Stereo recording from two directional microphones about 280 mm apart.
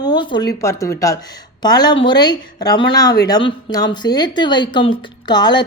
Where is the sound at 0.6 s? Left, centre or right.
Centre.